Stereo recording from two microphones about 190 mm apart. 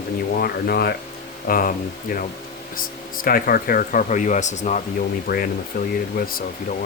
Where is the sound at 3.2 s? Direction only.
50° left (ahead or behind).